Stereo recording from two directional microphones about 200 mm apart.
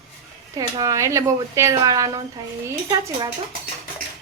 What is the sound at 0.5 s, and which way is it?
Speech, 15° right (ahead or behind).